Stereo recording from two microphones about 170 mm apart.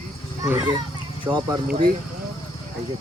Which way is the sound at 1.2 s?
30° right (ahead or behind).